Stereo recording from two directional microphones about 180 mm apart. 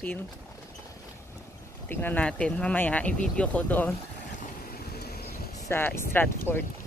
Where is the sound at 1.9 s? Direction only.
10° left (ahead or behind).